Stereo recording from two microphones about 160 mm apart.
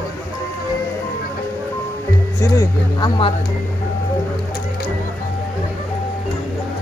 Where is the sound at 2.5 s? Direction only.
20° left (ahead or behind).